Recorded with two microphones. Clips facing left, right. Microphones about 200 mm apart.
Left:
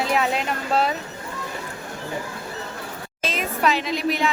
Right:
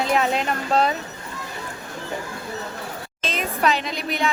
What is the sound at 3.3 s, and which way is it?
Speech, centre (ahead or behind).